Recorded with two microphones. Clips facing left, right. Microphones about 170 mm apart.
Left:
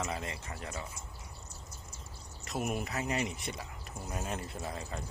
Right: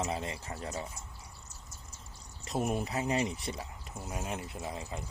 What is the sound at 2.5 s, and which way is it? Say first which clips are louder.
Speech: right 3 dB; 30° right (ahead or behind).